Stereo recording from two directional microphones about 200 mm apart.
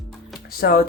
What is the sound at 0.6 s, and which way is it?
Speech, 50° left (ahead or behind).